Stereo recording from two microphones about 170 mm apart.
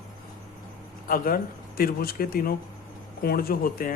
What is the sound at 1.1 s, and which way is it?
Speech, 60° left (ahead or behind).